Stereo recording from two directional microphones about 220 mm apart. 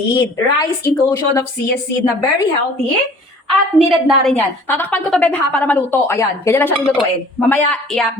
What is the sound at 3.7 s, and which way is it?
A woman's voice, centre (ahead or behind).